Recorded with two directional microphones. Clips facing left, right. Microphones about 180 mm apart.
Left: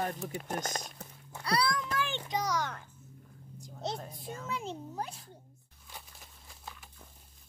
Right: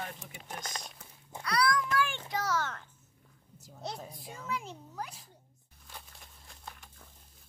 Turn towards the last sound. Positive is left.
turn(degrees=5)  # may be behind; listen again after turning